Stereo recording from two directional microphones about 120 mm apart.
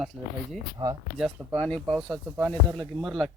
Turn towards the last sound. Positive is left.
turn(degrees=0)  # may be behind; listen again after turning